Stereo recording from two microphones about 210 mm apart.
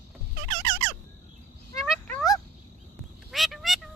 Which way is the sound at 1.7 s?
Centre (ahead or behind).